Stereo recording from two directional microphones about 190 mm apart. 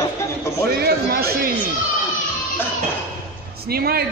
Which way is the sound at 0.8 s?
55° right (ahead or behind).